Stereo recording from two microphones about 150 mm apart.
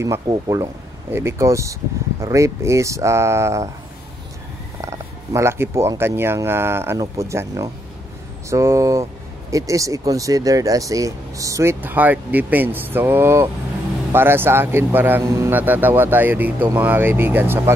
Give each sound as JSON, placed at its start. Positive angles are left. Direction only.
{"t": 0.0, "sound": "speech", "side_deg": -20}
{"t": 4.8, "sound": "a man's voice", "side_deg": -20}